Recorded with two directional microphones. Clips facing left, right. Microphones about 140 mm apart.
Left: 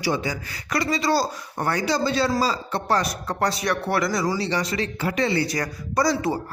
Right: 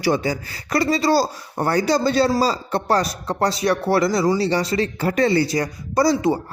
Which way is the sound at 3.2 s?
25° right (ahead or behind).